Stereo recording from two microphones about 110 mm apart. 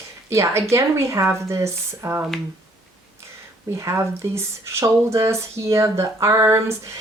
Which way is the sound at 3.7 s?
25° right (ahead or behind).